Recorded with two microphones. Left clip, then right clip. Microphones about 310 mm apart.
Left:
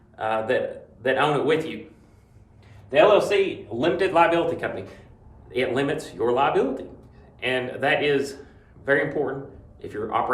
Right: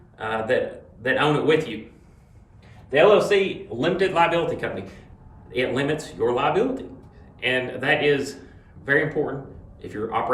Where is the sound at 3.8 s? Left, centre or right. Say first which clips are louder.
Left 1 dB; centre.